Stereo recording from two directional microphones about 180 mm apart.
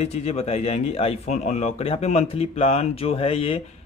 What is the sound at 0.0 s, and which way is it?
Speech, 35° left (ahead or behind).